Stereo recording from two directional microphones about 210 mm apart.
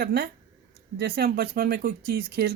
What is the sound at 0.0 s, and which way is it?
Speech, 50° right (ahead or behind).